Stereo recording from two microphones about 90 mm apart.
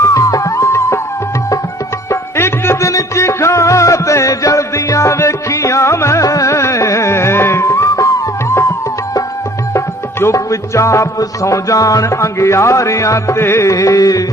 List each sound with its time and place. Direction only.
0.0 s music: 40° left (ahead or behind)
2.0 s music: 30° left (ahead or behind)
9.7 s music: 30° left (ahead or behind)